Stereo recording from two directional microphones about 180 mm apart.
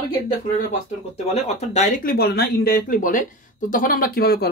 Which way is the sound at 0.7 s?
35° left (ahead or behind).